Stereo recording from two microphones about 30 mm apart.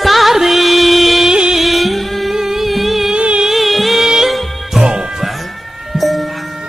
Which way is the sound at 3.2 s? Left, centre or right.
Right.